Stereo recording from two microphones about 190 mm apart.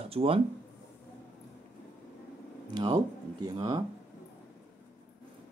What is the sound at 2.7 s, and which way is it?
Speech, 25° right (ahead or behind).